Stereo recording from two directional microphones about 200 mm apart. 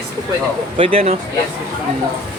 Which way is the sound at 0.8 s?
30° right (ahead or behind).